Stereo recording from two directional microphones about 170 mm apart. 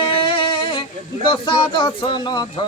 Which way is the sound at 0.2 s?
30° left (ahead or behind).